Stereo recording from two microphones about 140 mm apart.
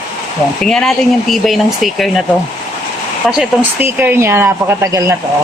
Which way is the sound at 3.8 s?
15° right (ahead or behind).